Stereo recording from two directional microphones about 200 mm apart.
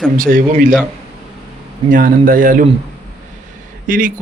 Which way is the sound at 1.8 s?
40° right (ahead or behind).